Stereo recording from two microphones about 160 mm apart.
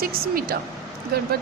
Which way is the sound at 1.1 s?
80° right.